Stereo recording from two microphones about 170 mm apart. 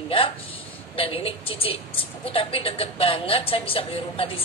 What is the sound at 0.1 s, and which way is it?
A woman's voice, 35° left (ahead or behind).